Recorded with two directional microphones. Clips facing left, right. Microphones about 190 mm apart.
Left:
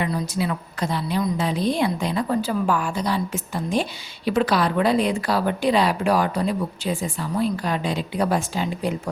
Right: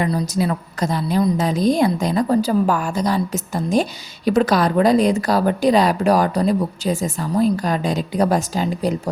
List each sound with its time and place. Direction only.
0.0 s a woman's voice: 40° right (ahead or behind)